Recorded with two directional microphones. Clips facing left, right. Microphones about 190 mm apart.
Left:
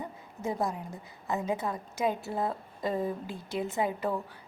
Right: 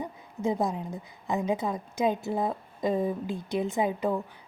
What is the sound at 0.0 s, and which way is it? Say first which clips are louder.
A woman's voice: right 5 dB; 20° right (ahead or behind).